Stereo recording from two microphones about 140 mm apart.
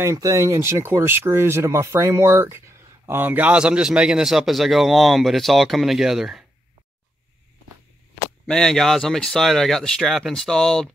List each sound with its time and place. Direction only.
0.0 s a man's voice: 25° right (ahead or behind); by 6.4 s centre (ahead or behind)
8.5 s a man's voice: 5° left (ahead or behind)